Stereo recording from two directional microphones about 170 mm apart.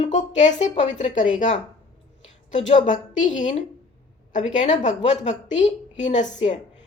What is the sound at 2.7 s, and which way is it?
Speech, 45° left (ahead or behind).